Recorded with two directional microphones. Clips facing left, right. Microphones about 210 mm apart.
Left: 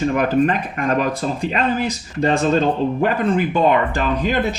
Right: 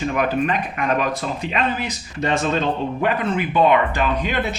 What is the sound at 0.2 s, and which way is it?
Speech, 40° left (ahead or behind).